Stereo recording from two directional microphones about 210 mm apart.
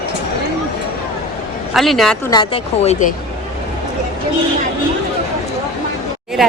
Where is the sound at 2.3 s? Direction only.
25° left (ahead or behind).